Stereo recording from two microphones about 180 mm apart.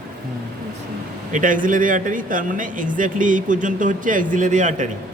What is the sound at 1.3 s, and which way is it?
Speech, 50° right (ahead or behind).